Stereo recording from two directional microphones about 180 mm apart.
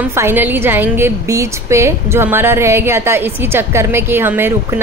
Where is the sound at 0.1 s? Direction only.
15° right (ahead or behind).